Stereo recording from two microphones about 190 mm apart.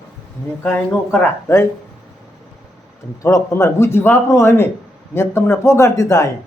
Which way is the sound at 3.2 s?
15° left (ahead or behind).